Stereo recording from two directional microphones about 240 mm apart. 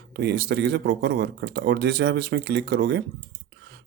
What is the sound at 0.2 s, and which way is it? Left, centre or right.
Speech, right.